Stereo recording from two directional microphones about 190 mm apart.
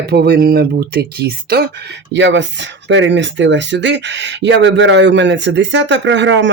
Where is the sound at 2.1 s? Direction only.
70° right (ahead or behind).